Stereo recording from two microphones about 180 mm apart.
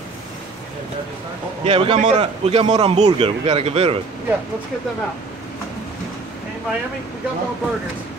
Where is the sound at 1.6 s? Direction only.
35° right (ahead or behind).